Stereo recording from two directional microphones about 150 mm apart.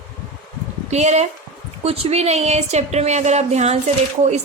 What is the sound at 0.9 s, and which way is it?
A woman's voice, 50° right (ahead or behind).